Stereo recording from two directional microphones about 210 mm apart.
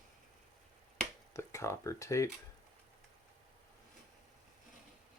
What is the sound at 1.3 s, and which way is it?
Speech, 15° left (ahead or behind).